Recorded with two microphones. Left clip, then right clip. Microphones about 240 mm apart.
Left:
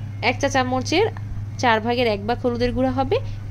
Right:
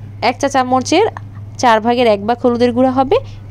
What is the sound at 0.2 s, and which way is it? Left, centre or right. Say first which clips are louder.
A woman's voice: right 6 dB; right.